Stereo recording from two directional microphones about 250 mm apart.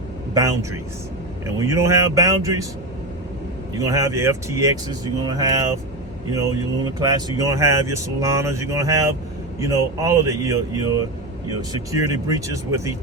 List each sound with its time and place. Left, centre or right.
0.3 s speech: centre
3.8 s speech: centre